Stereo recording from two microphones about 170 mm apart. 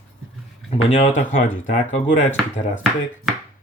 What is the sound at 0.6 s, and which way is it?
Speech, 40° left (ahead or behind).